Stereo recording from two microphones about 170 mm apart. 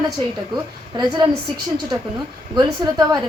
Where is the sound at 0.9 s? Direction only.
25° right (ahead or behind).